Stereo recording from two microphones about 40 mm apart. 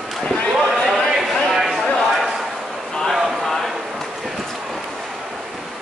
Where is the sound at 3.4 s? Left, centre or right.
Centre.